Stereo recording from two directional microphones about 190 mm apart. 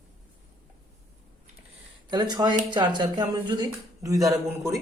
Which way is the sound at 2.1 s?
20° right (ahead or behind).